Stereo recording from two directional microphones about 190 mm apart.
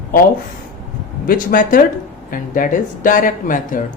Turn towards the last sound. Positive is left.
turn(degrees=45)  # may be behind; listen again after turning